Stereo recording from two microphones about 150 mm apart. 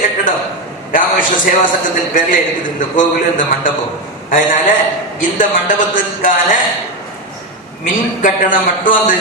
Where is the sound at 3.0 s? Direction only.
60° left (ahead or behind).